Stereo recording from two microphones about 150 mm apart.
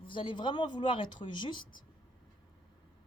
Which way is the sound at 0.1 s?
35° left (ahead or behind).